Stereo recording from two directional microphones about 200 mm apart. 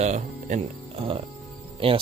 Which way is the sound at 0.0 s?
35° right (ahead or behind).